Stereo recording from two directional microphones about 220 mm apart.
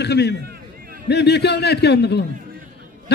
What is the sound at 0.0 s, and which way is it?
A man's voice, 50° left (ahead or behind).